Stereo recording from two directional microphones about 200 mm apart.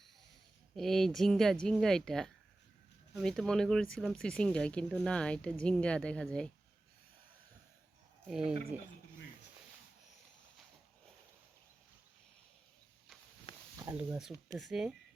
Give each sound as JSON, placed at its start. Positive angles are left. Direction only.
{"t": 0.8, "sound": "speech", "side_deg": 0}
{"t": 8.3, "sound": "speech", "side_deg": -5}
{"t": 13.7, "sound": "speech", "side_deg": -10}